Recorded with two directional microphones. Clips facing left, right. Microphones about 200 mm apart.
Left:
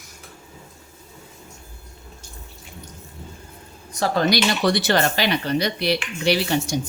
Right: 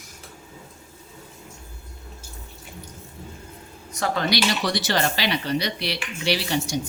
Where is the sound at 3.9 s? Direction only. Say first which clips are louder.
Left 4 dB; 35° left (ahead or behind).